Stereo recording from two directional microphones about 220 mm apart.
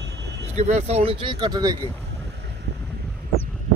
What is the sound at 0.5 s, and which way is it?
Speech, 30° right (ahead or behind).